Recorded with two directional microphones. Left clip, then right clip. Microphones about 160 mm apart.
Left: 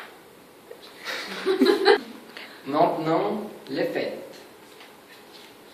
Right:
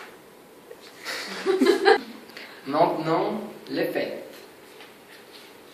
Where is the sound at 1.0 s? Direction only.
5° left (ahead or behind).